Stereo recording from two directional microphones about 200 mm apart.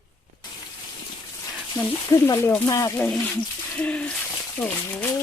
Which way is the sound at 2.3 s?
15° left (ahead or behind).